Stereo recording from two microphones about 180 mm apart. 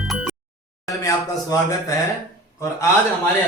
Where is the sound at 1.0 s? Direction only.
20° left (ahead or behind).